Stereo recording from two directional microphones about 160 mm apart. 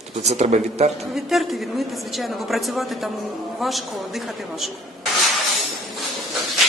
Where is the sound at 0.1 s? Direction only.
45° right (ahead or behind).